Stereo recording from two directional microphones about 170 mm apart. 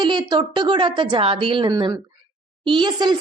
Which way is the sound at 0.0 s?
25° right (ahead or behind).